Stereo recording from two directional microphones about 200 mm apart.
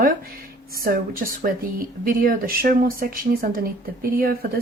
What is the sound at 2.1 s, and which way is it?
Speech, 45° right (ahead or behind).